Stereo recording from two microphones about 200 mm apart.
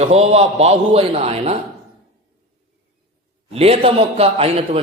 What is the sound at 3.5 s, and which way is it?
A man's voice, 30° right (ahead or behind).